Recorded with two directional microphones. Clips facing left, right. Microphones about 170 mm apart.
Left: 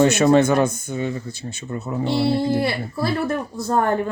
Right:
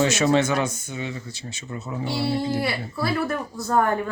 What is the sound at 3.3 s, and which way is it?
Speech, 25° left (ahead or behind).